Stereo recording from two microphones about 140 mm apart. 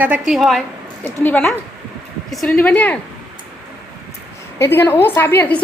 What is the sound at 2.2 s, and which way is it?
Speech, centre (ahead or behind).